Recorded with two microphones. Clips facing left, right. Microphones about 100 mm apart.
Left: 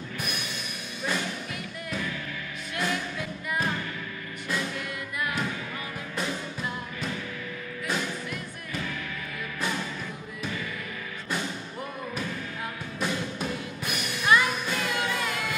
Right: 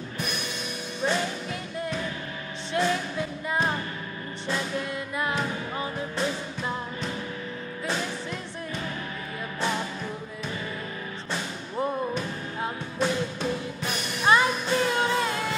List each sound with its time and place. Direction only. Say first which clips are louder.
1.0 s music: right 4 dB; 30° right (ahead or behind)
14.2 s music: right 2 dB; 30° right (ahead or behind)